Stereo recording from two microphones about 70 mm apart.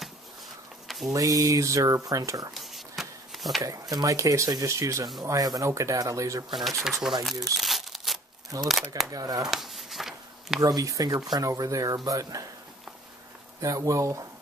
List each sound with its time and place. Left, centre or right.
0.8 s a sound: centre
1.1 s speech: right
2.5 s a sound: centre
3.9 s speech: right
5.2 s speech: right
6.8 s speech: centre
7.5 s crumpling: centre
8.6 s speech: centre
9.1 s speech: right
9.5 s a sound: centre
10.6 s speech: right
13.6 s speech: right